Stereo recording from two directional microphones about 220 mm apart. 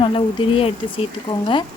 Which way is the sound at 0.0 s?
25° left (ahead or behind).